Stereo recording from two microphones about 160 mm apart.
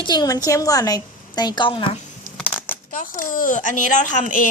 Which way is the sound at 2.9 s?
55° left (ahead or behind).